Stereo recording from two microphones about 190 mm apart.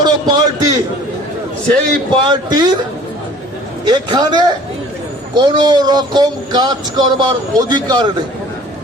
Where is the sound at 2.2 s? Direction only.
20° right (ahead or behind).